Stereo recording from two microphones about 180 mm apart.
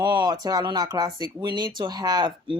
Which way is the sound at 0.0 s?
25° right (ahead or behind).